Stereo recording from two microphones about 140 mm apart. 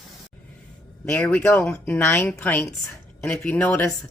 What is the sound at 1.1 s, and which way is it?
A woman's voice, 10° left (ahead or behind).